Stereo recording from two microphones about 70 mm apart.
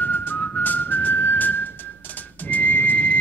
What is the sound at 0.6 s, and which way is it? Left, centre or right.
Whistling, left.